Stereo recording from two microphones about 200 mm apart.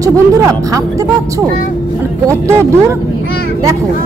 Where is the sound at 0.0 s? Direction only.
15° right (ahead or behind).